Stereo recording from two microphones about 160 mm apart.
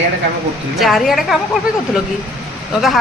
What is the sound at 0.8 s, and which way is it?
Speech, centre (ahead or behind).